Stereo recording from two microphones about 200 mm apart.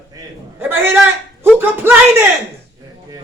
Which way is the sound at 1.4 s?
10° right (ahead or behind).